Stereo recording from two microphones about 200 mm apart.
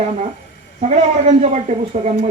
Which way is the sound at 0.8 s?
35° right (ahead or behind).